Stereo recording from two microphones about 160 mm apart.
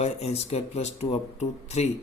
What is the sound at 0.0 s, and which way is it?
Speech, 40° left (ahead or behind).